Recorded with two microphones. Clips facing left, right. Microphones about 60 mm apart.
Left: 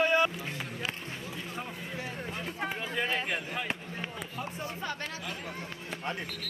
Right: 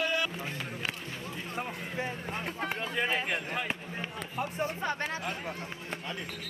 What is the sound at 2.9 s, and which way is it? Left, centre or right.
Speech, centre.